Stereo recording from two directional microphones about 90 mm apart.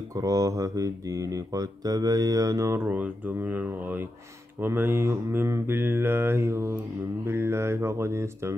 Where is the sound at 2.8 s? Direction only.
20° right (ahead or behind).